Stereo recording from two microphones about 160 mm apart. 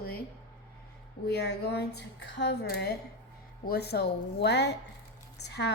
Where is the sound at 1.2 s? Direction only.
90° left.